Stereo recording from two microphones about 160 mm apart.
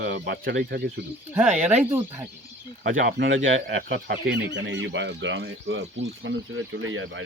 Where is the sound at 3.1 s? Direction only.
90° right.